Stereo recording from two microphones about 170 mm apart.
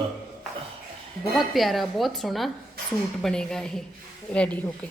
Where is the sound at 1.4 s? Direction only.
Centre (ahead or behind).